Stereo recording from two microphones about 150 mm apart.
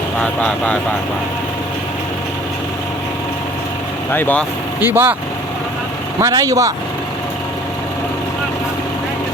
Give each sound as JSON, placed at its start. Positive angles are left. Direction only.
{"t": 0.2, "sound": "speech", "side_deg": 10}
{"t": 4.1, "sound": "speech", "side_deg": 10}
{"t": 4.8, "sound": "speech", "side_deg": -15}
{"t": 6.1, "sound": "speech", "side_deg": -20}